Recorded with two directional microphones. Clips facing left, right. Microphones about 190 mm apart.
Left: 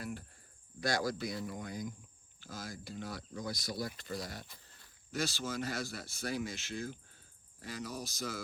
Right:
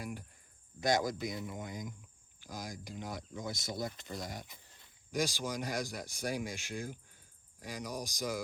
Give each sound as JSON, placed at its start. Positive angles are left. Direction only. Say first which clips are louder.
{"t": 0.0, "sound": "cricket", "louder": "even", "side_deg": -15}
{"t": 0.8, "sound": "speech", "louder": "right 3 dB", "side_deg": -20}